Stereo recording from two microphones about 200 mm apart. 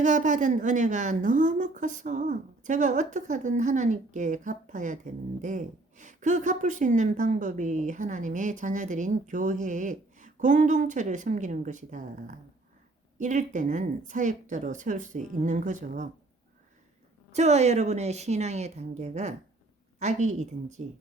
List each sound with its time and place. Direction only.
0.0 s a woman's voice: 40° right (ahead or behind)
17.3 s a woman's voice: 35° right (ahead or behind)